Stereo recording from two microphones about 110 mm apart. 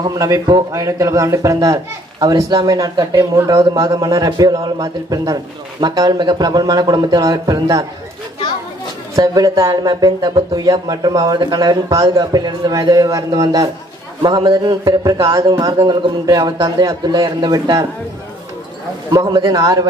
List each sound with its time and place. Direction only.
0.0 s a man's voice: 35° right (ahead or behind)
9.1 s a man's voice: 35° right (ahead or behind)
19.0 s a man's voice: 40° right (ahead or behind)